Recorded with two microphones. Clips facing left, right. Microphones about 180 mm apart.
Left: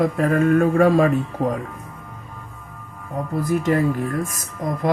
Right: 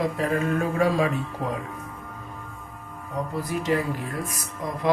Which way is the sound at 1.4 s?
45° left (ahead or behind).